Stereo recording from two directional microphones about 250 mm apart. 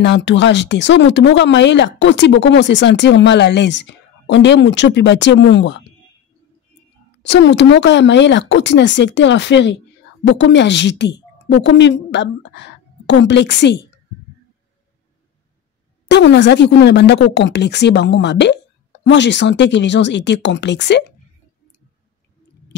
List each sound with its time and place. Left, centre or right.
0.0 s speech: left
7.2 s a woman's voice: left
16.1 s speech: left